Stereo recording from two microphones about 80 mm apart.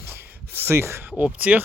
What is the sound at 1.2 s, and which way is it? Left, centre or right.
Speech, centre.